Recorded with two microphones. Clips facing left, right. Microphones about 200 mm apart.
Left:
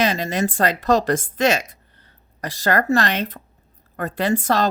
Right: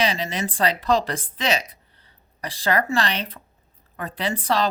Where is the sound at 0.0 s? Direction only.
45° left (ahead or behind).